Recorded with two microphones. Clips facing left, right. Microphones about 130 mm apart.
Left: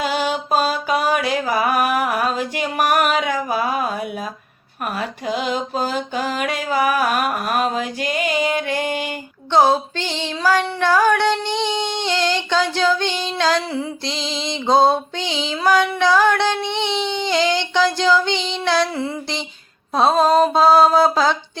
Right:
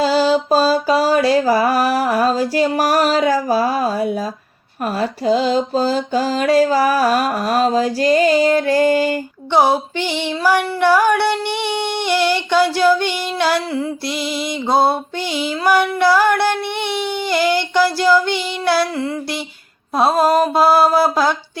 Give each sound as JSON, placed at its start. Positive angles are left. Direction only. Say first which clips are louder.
{"t": 0.0, "sound": "mantra", "louder": "right 7 dB", "side_deg": -35}
{"t": 9.5, "sound": "mantra", "louder": "even", "side_deg": -15}
{"t": 16.7, "sound": "a sound", "louder": "even", "side_deg": 20}
{"t": 17.1, "sound": "mantra", "louder": "right 3 dB", "side_deg": -10}